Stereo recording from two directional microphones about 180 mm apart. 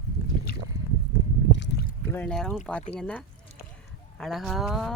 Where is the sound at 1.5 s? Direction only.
75° left (ahead or behind).